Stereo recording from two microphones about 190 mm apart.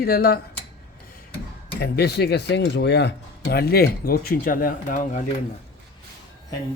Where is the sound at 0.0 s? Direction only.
50° left (ahead or behind).